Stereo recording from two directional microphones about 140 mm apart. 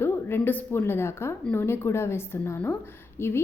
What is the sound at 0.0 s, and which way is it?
A woman's voice, 15° left (ahead or behind).